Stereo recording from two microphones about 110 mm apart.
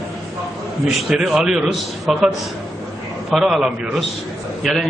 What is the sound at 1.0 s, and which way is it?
A man's voice, 5° right (ahead or behind).